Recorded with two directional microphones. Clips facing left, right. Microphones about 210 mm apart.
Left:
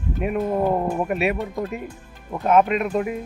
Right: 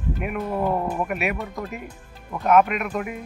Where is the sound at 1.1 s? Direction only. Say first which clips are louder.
Left 4 dB; 30° left (ahead or behind).